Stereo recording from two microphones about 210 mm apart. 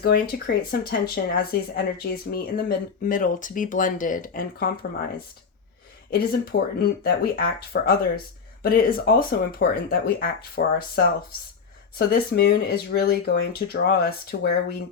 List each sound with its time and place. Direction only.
0.0 s speech: 45° left (ahead or behind)